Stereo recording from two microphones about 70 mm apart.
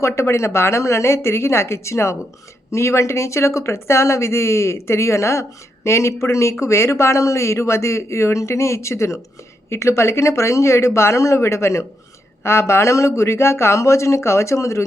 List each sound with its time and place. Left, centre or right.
0.0 s speech: left